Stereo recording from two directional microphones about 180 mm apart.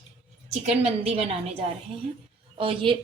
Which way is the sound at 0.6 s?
35° right (ahead or behind).